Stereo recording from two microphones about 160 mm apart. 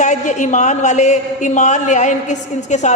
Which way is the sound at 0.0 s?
50° left (ahead or behind).